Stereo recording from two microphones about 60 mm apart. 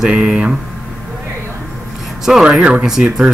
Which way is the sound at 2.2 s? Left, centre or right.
Centre.